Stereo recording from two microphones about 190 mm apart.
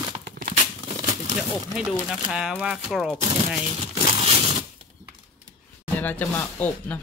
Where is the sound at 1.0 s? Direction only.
40° right (ahead or behind).